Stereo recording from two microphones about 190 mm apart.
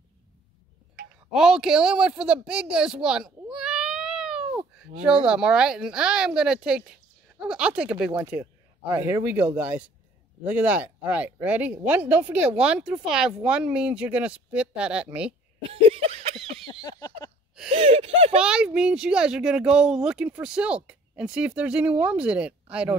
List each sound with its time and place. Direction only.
1.3 s speech: 5° right (ahead or behind)
15.7 s a sound: 30° right (ahead or behind)
17.6 s gasp: 30° right (ahead or behind)
18.4 s speech: 5° right (ahead or behind)